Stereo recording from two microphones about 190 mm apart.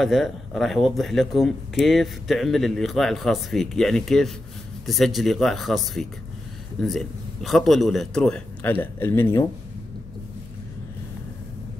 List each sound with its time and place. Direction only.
0.0 s speech: centre (ahead or behind)